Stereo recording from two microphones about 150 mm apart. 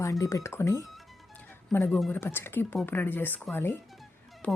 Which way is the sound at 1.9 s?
Centre (ahead or behind).